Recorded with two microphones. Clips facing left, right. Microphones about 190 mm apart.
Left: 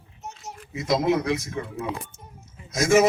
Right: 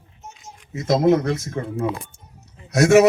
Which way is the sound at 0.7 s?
45° right (ahead or behind).